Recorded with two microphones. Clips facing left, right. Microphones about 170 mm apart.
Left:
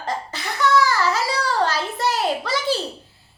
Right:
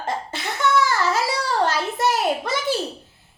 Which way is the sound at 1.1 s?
20° right (ahead or behind).